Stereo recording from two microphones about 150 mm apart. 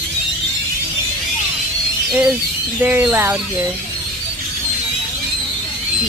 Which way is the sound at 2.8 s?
10° right (ahead or behind).